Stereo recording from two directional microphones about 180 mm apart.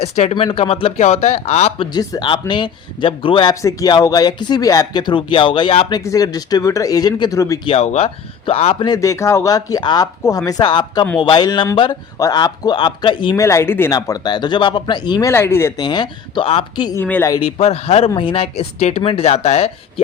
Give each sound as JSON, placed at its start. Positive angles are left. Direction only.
{"t": 0.0, "sound": "speech", "side_deg": 35}
{"t": 1.9, "sound": "speech", "side_deg": 25}
{"t": 3.5, "sound": "speech", "side_deg": 15}
{"t": 7.7, "sound": "speech", "side_deg": 35}
{"t": 8.8, "sound": "speech", "side_deg": 20}
{"t": 13.4, "sound": "speech", "side_deg": 15}
{"t": 17.0, "sound": "speech", "side_deg": 10}
{"t": 17.3, "sound": "speech", "side_deg": 30}